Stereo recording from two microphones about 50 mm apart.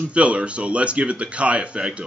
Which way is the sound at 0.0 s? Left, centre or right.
Right.